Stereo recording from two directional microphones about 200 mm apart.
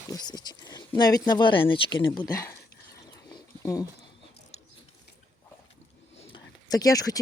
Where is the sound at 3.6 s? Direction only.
15° left (ahead or behind).